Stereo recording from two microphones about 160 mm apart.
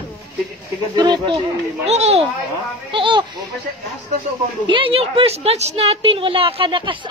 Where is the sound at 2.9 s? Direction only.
30° right (ahead or behind).